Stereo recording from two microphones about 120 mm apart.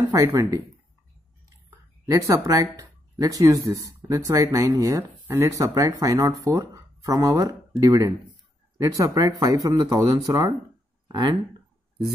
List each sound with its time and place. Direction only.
0.1 s speech: 25° right (ahead or behind)
2.0 s speech: 30° right (ahead or behind)